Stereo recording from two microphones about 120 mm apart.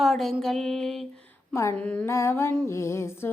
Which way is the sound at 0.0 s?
Centre (ahead or behind).